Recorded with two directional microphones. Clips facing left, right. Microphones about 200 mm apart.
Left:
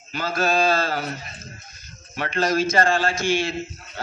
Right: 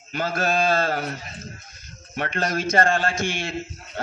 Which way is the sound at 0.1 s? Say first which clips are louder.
Left 1 dB; 55° right (ahead or behind).